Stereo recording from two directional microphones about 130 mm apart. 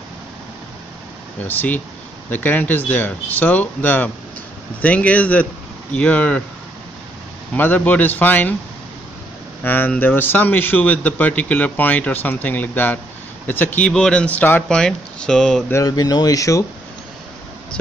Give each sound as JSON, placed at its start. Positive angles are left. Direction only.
{"t": 1.4, "sound": "a man's voice", "side_deg": 15}
{"t": 7.5, "sound": "a man's voice", "side_deg": 15}
{"t": 9.6, "sound": "a man's voice", "side_deg": 15}
{"t": 15.7, "sound": "speech", "side_deg": 30}